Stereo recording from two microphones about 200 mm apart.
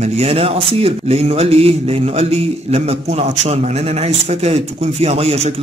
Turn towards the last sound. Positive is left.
turn(degrees=-30)  # may be behind; listen again after turning